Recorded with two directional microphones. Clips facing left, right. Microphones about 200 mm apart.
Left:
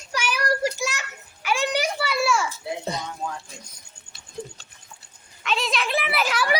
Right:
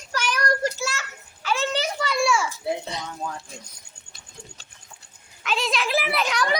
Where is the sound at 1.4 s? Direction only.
15° left (ahead or behind).